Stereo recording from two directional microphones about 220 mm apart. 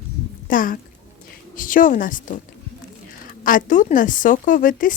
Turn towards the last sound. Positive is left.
turn(degrees=35)  # may be behind; listen again after turning